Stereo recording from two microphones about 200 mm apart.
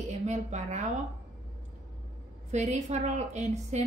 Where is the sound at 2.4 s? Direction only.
35° right (ahead or behind).